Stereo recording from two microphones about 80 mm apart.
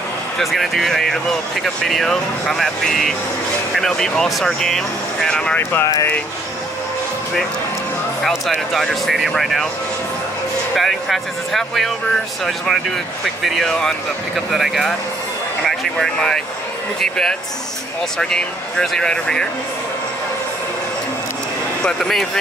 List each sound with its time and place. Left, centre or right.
0.4 s speech: centre
5.6 s speech: left
8.3 s speech: centre
10.8 s speech: centre
21.8 s speech: centre